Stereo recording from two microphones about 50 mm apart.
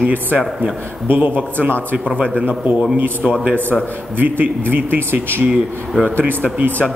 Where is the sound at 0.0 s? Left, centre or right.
Right.